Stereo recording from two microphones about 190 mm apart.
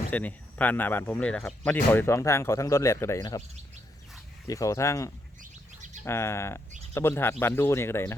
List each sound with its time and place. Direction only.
0.1 s speech: 10° left (ahead or behind)
4.4 s speech: 15° left (ahead or behind)
5.4 s bird: 40° right (ahead or behind)
6.1 s speech: 15° left (ahead or behind)